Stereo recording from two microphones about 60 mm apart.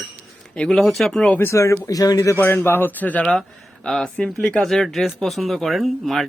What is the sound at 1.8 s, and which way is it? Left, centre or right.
Speech, left.